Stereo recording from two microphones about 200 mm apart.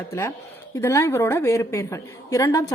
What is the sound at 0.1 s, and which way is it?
A woman's voice, 15° left (ahead or behind).